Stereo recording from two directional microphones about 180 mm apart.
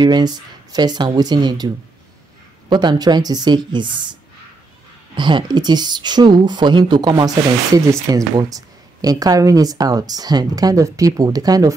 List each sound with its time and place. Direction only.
0.0 s speech: 25° right (ahead or behind)
2.7 s speech: 25° right (ahead or behind)
5.1 s speech: 25° right (ahead or behind)